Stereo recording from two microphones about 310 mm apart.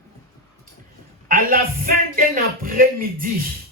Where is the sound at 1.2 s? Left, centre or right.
Right.